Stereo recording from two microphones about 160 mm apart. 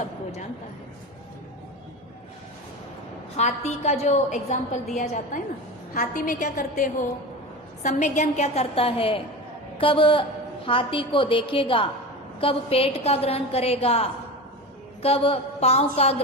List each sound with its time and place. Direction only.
3.3 s a woman's voice: 45° left (ahead or behind)